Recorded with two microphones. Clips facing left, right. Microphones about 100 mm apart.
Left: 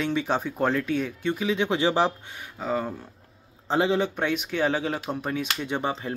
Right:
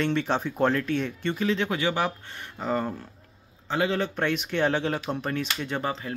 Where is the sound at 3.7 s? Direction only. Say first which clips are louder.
Left 3 dB; 20° left (ahead or behind).